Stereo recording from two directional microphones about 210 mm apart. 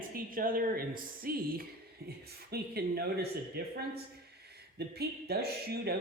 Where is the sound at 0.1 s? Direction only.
40° right (ahead or behind).